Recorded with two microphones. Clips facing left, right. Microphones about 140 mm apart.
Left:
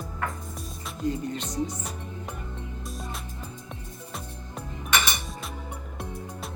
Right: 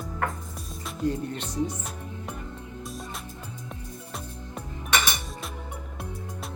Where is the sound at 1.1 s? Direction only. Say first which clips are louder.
Left 2 dB; 65° right (ahead or behind).